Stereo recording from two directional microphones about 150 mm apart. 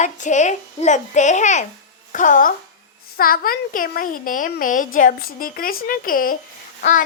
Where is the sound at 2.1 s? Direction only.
60° left (ahead or behind).